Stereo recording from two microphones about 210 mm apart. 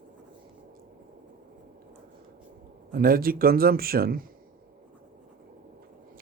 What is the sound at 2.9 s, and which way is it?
Speech, 45° right (ahead or behind).